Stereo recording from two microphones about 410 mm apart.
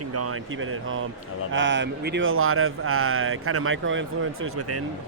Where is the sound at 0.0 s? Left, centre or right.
Right.